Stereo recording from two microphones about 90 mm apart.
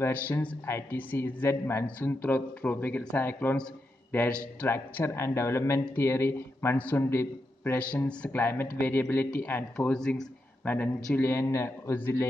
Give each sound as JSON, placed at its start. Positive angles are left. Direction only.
{"t": 0.1, "sound": "a man's voice", "side_deg": 15}
{"t": 1.9, "sound": "a man's voice", "side_deg": 15}
{"t": 6.8, "sound": "a man's voice", "side_deg": 15}
{"t": 8.3, "sound": "a man's voice", "side_deg": 25}
{"t": 10.6, "sound": "a man's voice", "side_deg": 15}